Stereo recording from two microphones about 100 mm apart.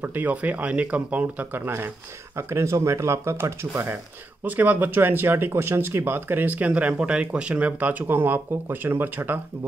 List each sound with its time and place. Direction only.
0.0 s speech: 20° right (ahead or behind)
4.5 s speech: 15° right (ahead or behind)